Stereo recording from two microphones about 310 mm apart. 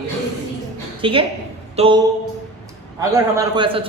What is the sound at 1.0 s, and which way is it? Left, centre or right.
A man's voice, centre.